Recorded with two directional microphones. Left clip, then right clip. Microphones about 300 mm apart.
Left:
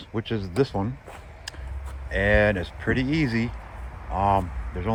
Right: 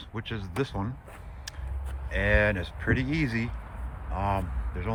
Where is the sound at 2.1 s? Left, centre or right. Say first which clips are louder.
Left 4 dB; centre.